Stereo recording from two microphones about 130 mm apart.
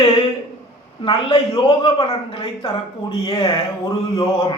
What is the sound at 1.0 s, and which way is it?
A man's voice, 40° left (ahead or behind).